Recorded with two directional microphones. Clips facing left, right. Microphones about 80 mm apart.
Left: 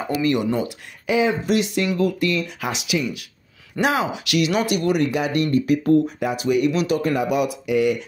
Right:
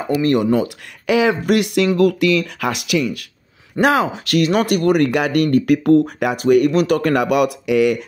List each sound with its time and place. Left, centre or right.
0.2 s speech: right
1.0 s speech: right
2.0 s speech: right
6.3 s speech: right